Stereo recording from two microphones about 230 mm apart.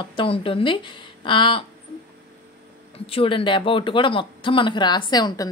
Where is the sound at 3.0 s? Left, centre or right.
Left.